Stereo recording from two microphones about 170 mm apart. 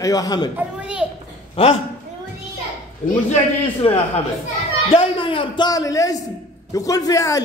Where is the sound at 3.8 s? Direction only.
35° left (ahead or behind).